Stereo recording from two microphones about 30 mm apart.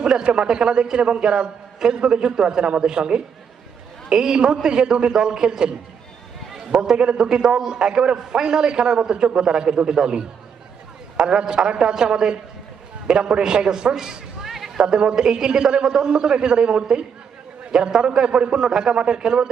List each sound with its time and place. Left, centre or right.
0.1 s a man's voice: right
1.2 s a man's voice: right
6.9 s a man's voice: right
7.2 s a man's voice: right
14.4 s a sound: centre
14.8 s a man's voice: right